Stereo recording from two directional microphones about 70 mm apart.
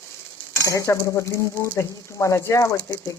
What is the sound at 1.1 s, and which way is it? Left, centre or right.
Speech, left.